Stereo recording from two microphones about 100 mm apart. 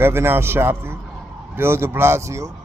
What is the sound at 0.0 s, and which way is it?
A man's voice, 25° right (ahead or behind).